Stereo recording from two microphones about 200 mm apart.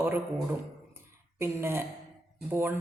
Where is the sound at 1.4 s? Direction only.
10° right (ahead or behind).